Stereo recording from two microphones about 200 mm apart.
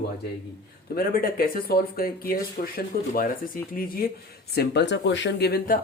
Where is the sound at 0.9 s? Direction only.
45° left (ahead or behind).